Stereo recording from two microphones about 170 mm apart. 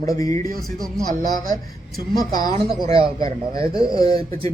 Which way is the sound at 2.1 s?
60° right (ahead or behind).